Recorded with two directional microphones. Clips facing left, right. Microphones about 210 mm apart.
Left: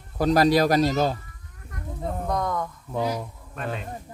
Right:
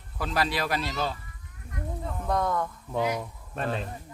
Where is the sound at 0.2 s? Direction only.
40° left (ahead or behind).